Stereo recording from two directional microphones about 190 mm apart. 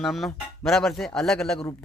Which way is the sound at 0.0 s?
Centre (ahead or behind).